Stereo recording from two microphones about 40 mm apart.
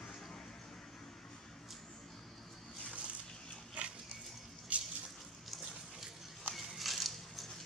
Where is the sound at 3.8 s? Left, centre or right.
Right.